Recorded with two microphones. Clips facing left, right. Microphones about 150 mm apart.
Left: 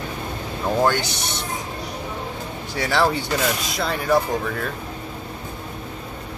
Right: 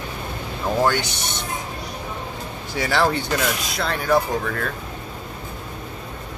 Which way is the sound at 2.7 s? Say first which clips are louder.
Even; centre (ahead or behind).